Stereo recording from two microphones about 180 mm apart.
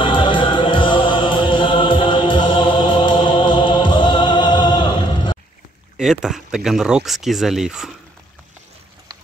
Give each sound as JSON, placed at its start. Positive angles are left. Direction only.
{"t": 0.0, "sound": "music", "side_deg": 25}
{"t": 5.9, "sound": "speech", "side_deg": 0}